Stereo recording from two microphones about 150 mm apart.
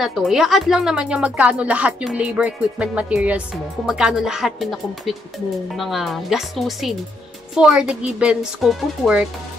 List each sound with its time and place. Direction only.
0.0 s speech: centre (ahead or behind)